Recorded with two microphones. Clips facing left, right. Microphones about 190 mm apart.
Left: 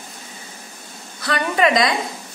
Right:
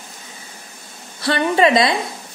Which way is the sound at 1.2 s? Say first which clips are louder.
Right 3 dB; 30° right (ahead or behind).